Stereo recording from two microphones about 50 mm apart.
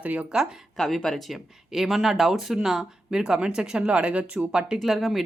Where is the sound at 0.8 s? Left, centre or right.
Centre.